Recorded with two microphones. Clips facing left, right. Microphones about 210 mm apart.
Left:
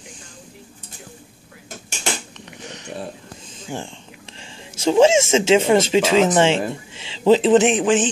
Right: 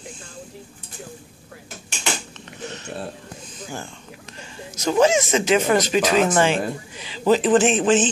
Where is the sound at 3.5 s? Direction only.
25° left (ahead or behind).